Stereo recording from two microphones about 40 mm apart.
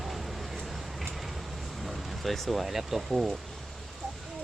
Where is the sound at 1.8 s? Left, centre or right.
Centre.